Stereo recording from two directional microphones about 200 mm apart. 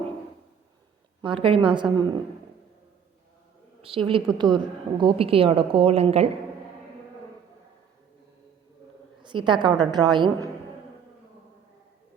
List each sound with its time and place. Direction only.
1.2 s a woman's voice: 25° right (ahead or behind)
3.8 s a woman's voice: 25° right (ahead or behind)
9.2 s a woman's voice: 25° right (ahead or behind)